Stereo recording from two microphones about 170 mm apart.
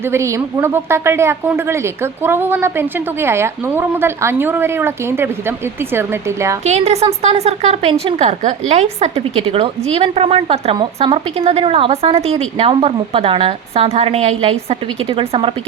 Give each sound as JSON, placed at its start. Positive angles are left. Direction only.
{"t": 0.1, "sound": "speech", "side_deg": -15}
{"t": 6.7, "sound": "a woman's voice", "side_deg": -40}